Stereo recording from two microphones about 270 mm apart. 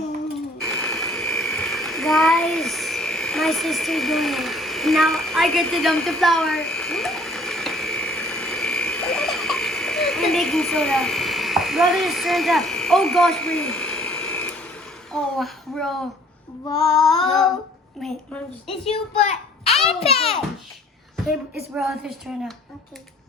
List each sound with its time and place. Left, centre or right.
0.6 s a sound: centre
15.1 s a child's voice: centre
16.6 s female singing: centre
17.2 s a woman's voice: centre
19.9 s a child's voice: left
21.8 s a woman's voice: centre